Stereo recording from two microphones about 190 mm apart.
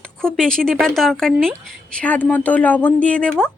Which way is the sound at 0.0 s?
5° left (ahead or behind).